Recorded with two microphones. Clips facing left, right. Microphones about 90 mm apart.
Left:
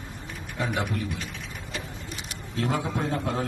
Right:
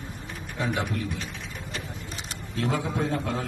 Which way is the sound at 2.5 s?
40° left (ahead or behind).